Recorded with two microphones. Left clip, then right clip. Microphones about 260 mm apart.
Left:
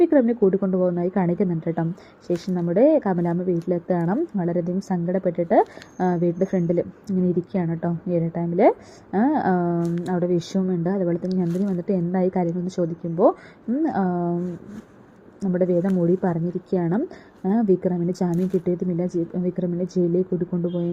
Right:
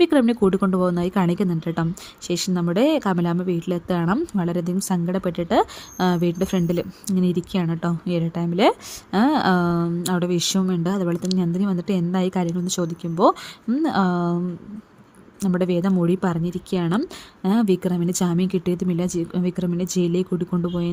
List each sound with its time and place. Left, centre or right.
0.0 s speech: right
15.4 s speech: right